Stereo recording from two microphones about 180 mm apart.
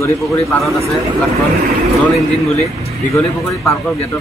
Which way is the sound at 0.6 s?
Centre (ahead or behind).